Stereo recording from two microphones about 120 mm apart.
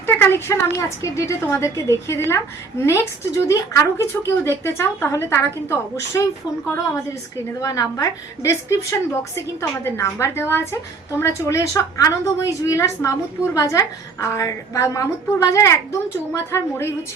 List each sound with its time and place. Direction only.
0.0 s a woman's voice: 20° left (ahead or behind)
7.6 s a woman's voice: 30° left (ahead or behind)